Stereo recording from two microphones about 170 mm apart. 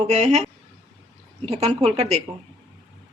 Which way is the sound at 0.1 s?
45° right (ahead or behind).